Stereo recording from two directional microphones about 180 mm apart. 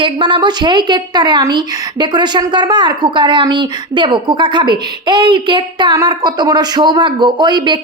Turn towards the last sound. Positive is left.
turn(degrees=-25)  # may be behind; listen again after turning